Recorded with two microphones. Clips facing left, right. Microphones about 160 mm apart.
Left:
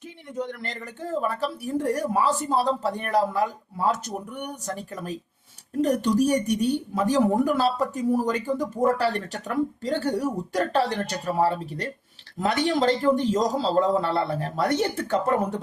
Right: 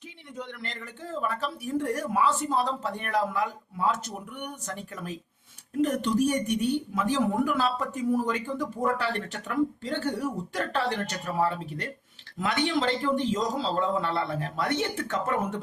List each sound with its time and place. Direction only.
0.3 s a woman's voice: 40° left (ahead or behind)